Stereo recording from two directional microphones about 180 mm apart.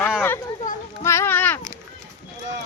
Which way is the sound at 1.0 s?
15° left (ahead or behind).